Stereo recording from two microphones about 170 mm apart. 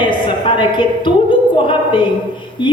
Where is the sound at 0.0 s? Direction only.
30° left (ahead or behind).